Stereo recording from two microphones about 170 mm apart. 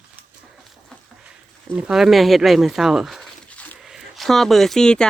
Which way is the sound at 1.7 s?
5° right (ahead or behind).